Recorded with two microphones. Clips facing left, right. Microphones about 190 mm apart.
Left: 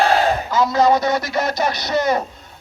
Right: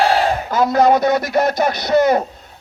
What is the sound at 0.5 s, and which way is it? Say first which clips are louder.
Speech: right 3 dB; 55° right (ahead or behind).